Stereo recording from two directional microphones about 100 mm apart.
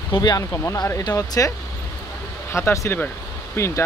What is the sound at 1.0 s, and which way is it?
Speech, 35° left (ahead or behind).